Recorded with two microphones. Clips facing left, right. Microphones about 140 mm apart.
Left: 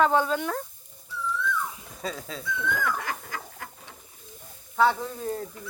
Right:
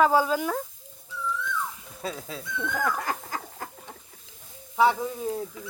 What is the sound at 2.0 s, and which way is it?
Speech, 5° right (ahead or behind).